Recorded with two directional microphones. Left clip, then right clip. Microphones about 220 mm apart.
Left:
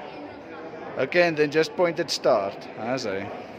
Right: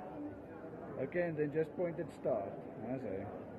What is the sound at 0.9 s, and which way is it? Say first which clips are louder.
A man's voice: left 16 dB; 50° left (ahead or behind).